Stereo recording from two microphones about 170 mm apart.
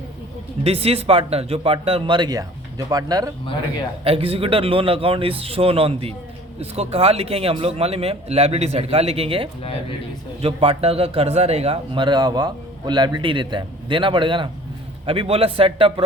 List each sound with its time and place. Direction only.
0.6 s a man's voice: 35° right (ahead or behind)
4.0 s a man's voice: 35° right (ahead or behind)